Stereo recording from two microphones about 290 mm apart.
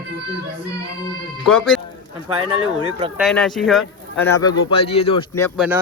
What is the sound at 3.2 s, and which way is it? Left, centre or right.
Speech, centre.